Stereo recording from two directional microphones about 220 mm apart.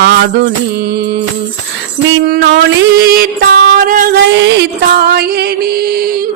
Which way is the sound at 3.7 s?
40° right (ahead or behind).